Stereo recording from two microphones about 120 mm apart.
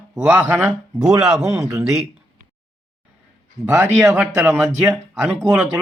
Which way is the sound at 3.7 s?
20° right (ahead or behind).